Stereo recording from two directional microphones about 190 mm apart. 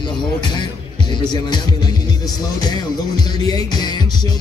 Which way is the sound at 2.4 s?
20° left (ahead or behind).